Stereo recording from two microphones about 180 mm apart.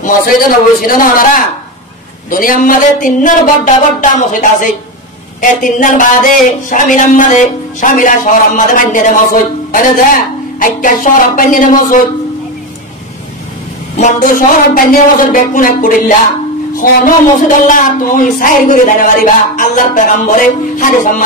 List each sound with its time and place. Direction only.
0.0 s a man's voice: 50° left (ahead or behind)
13.9 s a man's voice: 45° left (ahead or behind)